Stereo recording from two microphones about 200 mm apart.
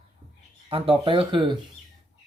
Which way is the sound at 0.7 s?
25° right (ahead or behind).